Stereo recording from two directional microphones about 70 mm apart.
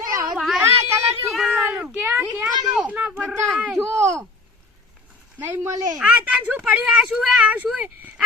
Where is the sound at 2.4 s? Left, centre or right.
Centre.